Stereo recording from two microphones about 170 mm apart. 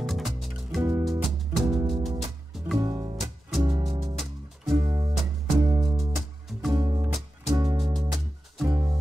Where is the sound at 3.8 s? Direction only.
30° right (ahead or behind).